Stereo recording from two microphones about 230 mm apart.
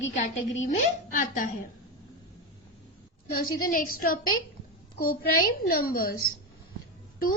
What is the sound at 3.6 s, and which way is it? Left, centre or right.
A woman's voice, left.